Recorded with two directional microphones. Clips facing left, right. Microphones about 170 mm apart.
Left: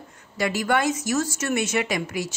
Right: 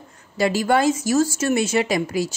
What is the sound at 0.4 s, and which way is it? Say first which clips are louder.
Speech: right 4 dB; 30° right (ahead or behind).